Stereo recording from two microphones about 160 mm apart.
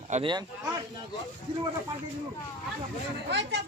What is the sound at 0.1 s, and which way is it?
Speech, 30° right (ahead or behind).